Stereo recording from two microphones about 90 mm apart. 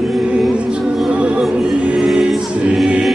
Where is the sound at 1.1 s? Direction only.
10° right (ahead or behind).